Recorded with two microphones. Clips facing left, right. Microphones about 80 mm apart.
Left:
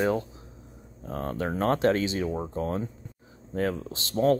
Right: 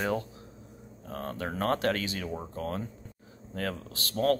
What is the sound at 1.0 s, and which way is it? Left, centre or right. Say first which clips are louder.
Speech: left 5 dB; left.